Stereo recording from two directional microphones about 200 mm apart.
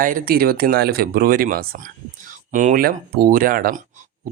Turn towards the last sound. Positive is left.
turn(degrees=-45)  # may be behind; listen again after turning